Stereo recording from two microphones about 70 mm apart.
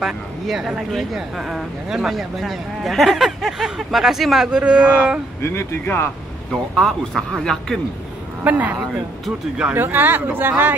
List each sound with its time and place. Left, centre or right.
0.0 s speech: centre
5.4 s speech: left
6.5 s speech: centre
8.5 s speech: right